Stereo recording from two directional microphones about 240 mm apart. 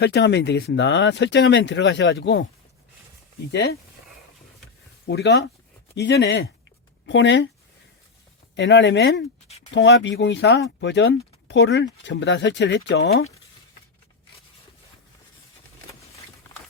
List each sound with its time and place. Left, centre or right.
0.0 s speech: left
3.5 s speech: left
5.0 s speech: left
8.5 s speech: left